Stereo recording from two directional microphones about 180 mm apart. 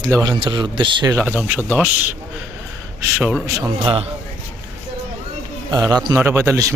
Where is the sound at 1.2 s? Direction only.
10° right (ahead or behind).